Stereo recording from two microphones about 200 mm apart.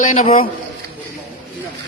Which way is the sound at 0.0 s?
35° left (ahead or behind).